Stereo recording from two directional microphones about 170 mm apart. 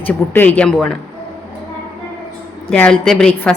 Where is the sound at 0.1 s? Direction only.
10° left (ahead or behind).